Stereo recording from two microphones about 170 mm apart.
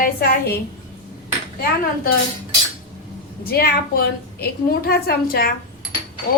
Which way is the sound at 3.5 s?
65° left (ahead or behind).